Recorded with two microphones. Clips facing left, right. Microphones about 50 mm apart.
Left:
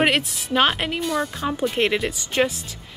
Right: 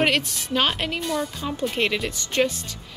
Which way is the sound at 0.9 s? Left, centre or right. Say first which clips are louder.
Left 2 dB; centre.